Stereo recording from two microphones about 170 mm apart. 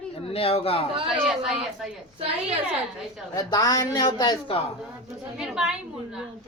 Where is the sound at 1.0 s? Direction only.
Centre (ahead or behind).